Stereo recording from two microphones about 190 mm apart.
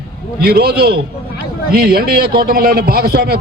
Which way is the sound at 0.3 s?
55° right (ahead or behind).